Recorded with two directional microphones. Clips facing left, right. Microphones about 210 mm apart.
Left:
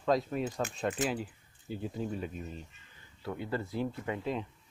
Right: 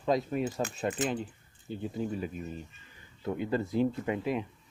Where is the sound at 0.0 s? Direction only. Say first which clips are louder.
Right 1 dB; 5° right (ahead or behind).